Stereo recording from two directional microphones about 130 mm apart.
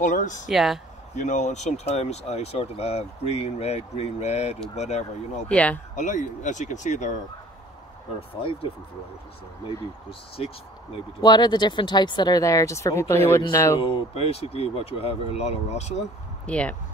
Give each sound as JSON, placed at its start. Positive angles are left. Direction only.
{"t": 0.0, "sound": "speech", "side_deg": 75}
{"t": 0.5, "sound": "speech", "side_deg": 0}
{"t": 1.1, "sound": "speech", "side_deg": 70}
{"t": 5.5, "sound": "speech", "side_deg": 10}
{"t": 5.9, "sound": "speech", "side_deg": 70}
{"t": 8.2, "sound": "speech", "side_deg": 45}
{"t": 10.4, "sound": "speech", "side_deg": 50}
{"t": 11.1, "sound": "speech", "side_deg": 30}
{"t": 13.7, "sound": "speech", "side_deg": 50}
{"t": 16.4, "sound": "speech", "side_deg": 10}